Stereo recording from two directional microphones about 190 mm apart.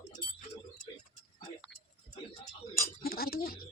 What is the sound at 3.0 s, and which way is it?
Chink, 50° left (ahead or behind).